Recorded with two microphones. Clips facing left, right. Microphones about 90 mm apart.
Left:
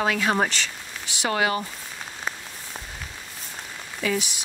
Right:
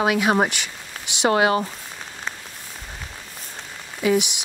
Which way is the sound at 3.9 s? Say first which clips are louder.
Right 6 dB; 15° right (ahead or behind).